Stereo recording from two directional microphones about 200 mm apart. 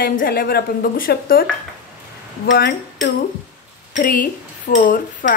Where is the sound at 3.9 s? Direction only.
40° left (ahead or behind).